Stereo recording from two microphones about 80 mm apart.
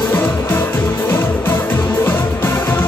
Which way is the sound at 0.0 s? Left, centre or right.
Left.